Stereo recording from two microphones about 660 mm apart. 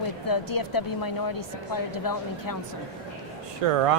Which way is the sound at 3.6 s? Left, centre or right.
Right.